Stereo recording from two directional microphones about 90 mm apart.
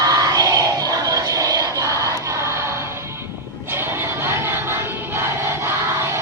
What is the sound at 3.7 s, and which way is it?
Crowd, 25° right (ahead or behind).